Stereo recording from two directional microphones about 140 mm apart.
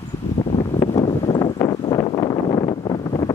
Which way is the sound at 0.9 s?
40° left (ahead or behind).